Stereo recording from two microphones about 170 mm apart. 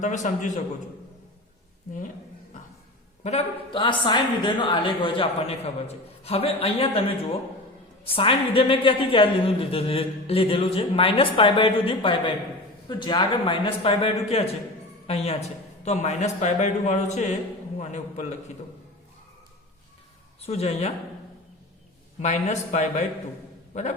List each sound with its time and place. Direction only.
0.0 s speech: 45° left (ahead or behind)
3.2 s a woman's voice: 35° left (ahead or behind)
20.4 s a woman's voice: 35° left (ahead or behind)
22.2 s speech: 40° left (ahead or behind)